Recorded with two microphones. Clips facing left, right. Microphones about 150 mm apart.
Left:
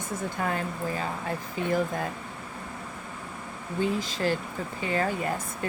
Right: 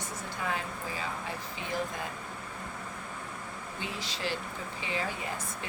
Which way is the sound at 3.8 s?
45° left (ahead or behind).